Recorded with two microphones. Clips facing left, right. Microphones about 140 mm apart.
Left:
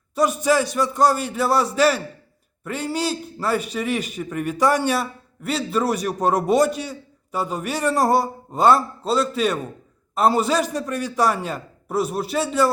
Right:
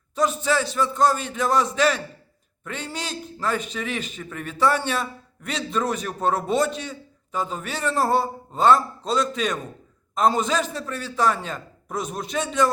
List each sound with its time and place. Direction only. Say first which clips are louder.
0.1 s a man's voice: left 3 dB; 10° left (ahead or behind)